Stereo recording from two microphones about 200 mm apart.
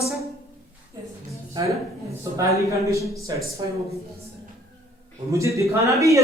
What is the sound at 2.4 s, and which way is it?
A woman's voice, 15° right (ahead or behind).